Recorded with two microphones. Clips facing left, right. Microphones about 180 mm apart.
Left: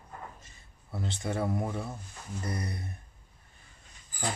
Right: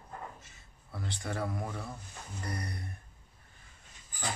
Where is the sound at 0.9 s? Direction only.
25° left (ahead or behind).